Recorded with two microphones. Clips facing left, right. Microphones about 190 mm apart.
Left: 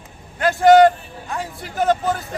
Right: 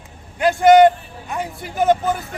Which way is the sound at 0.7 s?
20° right (ahead or behind).